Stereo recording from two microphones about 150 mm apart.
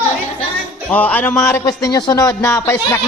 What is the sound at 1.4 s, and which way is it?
A man's voice, 20° left (ahead or behind).